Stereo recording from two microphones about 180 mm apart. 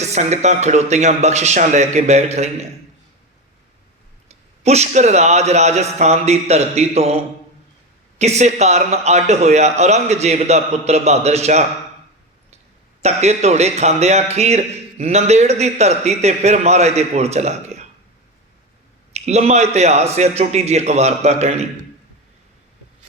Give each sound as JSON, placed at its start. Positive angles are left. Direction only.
{"t": 0.0, "sound": "a man's voice", "side_deg": -40}
{"t": 4.3, "sound": "a man's voice", "side_deg": -35}
{"t": 8.2, "sound": "a man's voice", "side_deg": -40}
{"t": 13.0, "sound": "a man's voice", "side_deg": -35}
{"t": 19.2, "sound": "a man's voice", "side_deg": -40}